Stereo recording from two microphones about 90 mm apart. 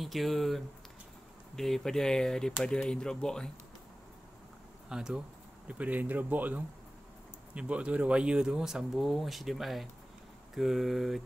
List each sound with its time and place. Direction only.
0.0 s speech: centre (ahead or behind)
4.8 s speech: 10° right (ahead or behind)